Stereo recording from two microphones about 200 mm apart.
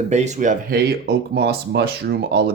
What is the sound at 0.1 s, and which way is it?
Speech, 35° right (ahead or behind).